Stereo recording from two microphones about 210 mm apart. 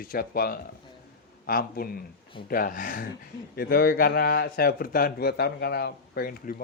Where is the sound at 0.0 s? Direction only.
45° left (ahead or behind).